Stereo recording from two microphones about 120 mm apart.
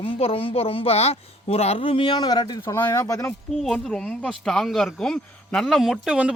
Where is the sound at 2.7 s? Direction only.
25° left (ahead or behind).